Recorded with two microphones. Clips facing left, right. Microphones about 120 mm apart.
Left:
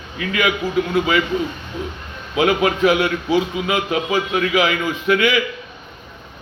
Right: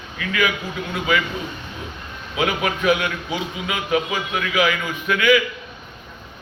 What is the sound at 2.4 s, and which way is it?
A man's voice, 30° left (ahead or behind).